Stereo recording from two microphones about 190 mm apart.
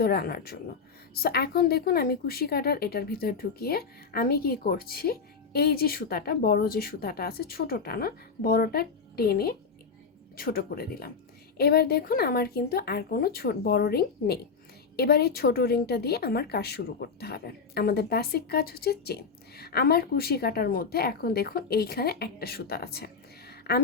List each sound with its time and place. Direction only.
0.0 s a woman's voice: 55° left (ahead or behind)